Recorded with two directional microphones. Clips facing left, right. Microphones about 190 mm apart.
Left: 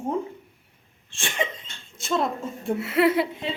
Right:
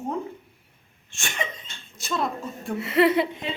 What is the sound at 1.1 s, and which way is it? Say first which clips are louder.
A woman's voice: left 3 dB; 30° left (ahead or behind).